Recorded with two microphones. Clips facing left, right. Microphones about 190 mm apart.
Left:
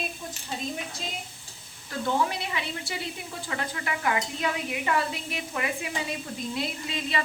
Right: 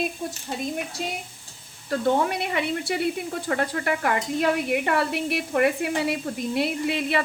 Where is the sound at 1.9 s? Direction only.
60° right (ahead or behind).